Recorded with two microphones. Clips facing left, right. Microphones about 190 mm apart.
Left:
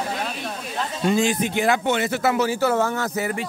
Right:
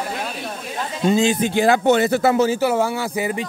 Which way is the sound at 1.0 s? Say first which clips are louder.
Right 3 dB; 25° right (ahead or behind).